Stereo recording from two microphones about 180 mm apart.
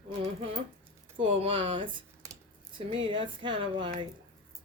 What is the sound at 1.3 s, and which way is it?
Speech, 30° right (ahead or behind).